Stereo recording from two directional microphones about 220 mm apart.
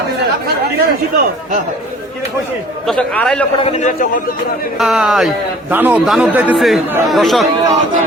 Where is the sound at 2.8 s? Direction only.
5° left (ahead or behind).